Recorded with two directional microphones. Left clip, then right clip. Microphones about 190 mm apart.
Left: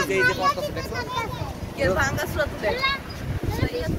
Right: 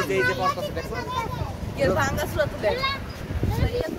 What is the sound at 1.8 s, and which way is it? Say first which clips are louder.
Speech: even; 15° right (ahead or behind).